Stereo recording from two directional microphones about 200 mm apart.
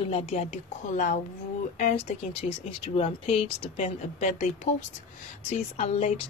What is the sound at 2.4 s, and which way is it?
A woman's voice, 35° left (ahead or behind).